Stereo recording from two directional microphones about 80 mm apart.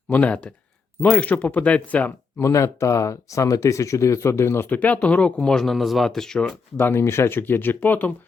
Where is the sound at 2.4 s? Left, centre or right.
Left; by 6.6 s centre.